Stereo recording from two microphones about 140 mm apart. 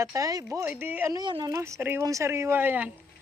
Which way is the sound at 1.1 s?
30° right (ahead or behind).